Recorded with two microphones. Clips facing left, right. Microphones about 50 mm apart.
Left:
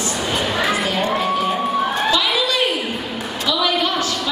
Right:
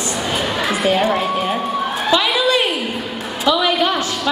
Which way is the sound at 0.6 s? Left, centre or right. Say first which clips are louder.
Right 5 dB; centre.